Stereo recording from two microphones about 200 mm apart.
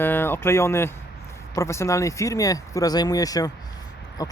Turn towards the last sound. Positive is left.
turn(degrees=20)  # may be behind; listen again after turning